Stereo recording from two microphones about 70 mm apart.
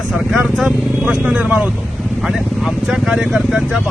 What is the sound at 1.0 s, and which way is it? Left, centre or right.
Speech, centre.